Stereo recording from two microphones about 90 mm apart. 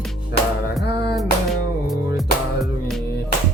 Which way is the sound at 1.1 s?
Centre (ahead or behind).